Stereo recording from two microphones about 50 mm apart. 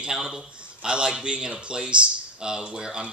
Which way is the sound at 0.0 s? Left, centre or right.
Centre.